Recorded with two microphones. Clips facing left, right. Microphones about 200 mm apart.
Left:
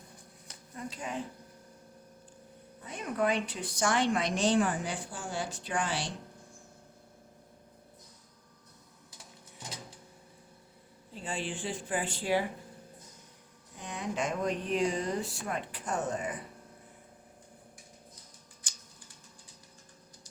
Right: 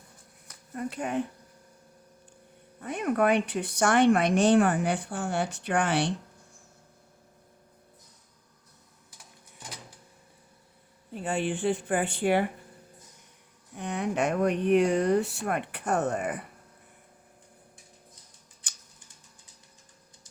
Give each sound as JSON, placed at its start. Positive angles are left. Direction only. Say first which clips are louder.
{"t": 0.7, "sound": "speech", "louder": "right 7 dB", "side_deg": -60}
{"t": 2.8, "sound": "speech", "louder": "right 6 dB", "side_deg": -60}
{"t": 11.1, "sound": "speech", "louder": "right 8 dB", "side_deg": -60}
{"t": 13.7, "sound": "speech", "louder": "right 6 dB", "side_deg": -65}